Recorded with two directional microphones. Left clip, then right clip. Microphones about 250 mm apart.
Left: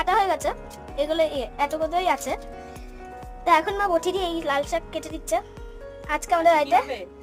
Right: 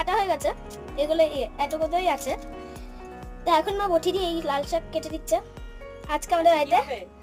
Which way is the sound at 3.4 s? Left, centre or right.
Centre.